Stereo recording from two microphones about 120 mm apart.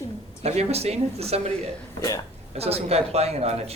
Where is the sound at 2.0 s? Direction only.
30° left (ahead or behind).